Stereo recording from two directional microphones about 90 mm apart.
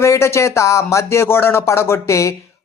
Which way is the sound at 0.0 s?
30° left (ahead or behind).